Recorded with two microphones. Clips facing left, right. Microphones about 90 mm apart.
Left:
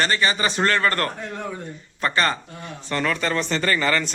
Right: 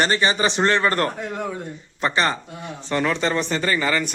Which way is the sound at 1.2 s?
10° right (ahead or behind).